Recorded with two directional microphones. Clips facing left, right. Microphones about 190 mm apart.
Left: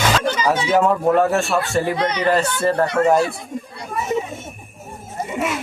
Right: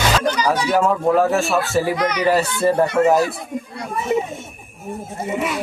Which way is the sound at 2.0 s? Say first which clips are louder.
Even; 30° left (ahead or behind).